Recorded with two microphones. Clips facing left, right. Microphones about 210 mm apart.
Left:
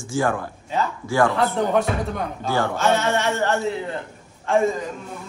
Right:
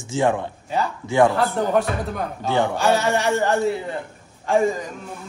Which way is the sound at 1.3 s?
Centre (ahead or behind).